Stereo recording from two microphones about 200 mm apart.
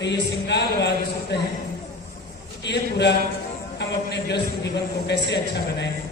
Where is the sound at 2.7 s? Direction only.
60° left (ahead or behind).